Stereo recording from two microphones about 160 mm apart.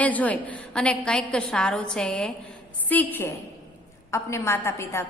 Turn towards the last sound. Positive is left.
turn(degrees=15)  # may be behind; listen again after turning